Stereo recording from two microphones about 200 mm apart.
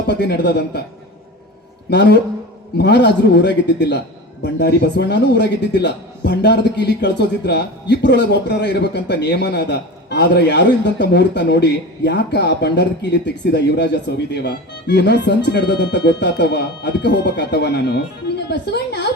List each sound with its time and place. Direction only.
0.1 s a man's voice: 60° left (ahead or behind)
1.9 s a man's voice: 60° left (ahead or behind)